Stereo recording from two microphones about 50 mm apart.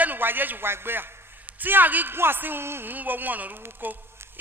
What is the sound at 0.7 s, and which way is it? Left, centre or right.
A man's voice, right.